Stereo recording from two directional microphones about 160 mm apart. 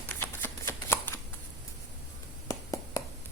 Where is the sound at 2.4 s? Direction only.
20° left (ahead or behind).